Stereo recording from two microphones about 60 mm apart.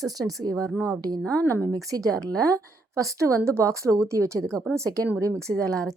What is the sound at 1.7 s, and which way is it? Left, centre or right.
A woman's voice, right.